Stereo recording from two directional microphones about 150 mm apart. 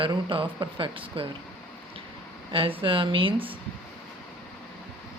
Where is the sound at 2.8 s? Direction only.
35° right (ahead or behind).